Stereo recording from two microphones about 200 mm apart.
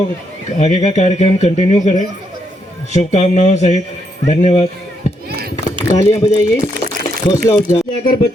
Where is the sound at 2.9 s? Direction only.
35° left (ahead or behind).